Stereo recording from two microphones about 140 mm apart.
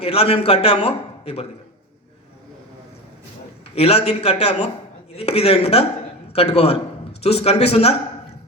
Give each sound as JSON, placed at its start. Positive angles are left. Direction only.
{"t": 0.0, "sound": "a man's voice", "side_deg": 45}
{"t": 3.8, "sound": "a man's voice", "side_deg": 45}